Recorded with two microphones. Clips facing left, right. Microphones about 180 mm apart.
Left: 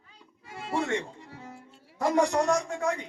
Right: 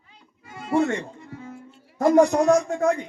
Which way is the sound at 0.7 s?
45° right (ahead or behind).